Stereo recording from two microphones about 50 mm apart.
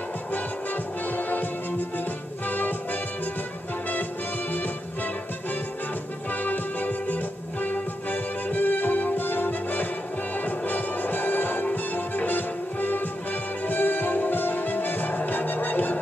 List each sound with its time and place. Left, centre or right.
1.0 s music: left
6.4 s music: left